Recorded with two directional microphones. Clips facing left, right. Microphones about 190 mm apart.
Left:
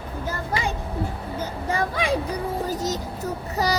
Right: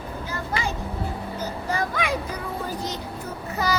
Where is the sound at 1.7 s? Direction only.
30° left (ahead or behind).